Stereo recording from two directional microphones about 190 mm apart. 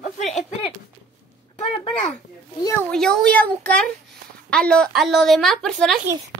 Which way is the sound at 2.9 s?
5° left (ahead or behind).